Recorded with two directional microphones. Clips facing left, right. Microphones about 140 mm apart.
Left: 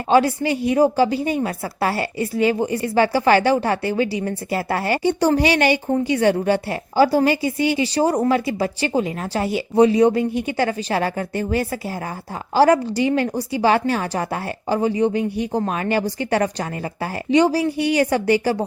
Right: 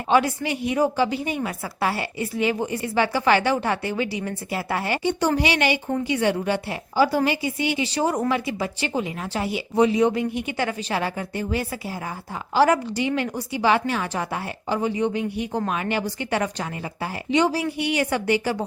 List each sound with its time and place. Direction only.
0.1 s a woman's voice: 35° left (ahead or behind)